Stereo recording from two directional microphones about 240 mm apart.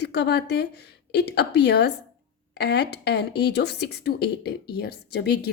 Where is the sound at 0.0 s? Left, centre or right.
Left.